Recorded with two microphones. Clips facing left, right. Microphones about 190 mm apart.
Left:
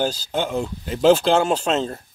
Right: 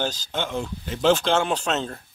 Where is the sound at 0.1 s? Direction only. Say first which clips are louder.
Left 5 dB; 10° left (ahead or behind).